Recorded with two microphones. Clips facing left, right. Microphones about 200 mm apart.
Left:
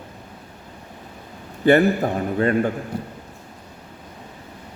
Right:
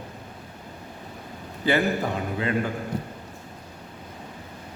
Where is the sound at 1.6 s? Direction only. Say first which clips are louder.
Left 8 dB; 55° left (ahead or behind).